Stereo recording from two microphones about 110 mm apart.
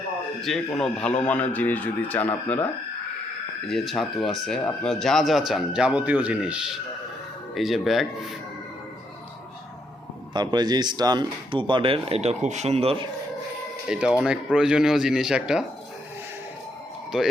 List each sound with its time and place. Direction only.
0.4 s a man's voice: 5° left (ahead or behind)
3.7 s speech: centre (ahead or behind)
10.3 s speech: 40° right (ahead or behind); by 13.1 s 60° right (ahead or behind)
13.8 s speech: 5° right (ahead or behind)